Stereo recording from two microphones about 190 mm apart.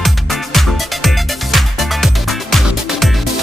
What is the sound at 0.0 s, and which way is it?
Music, centre (ahead or behind).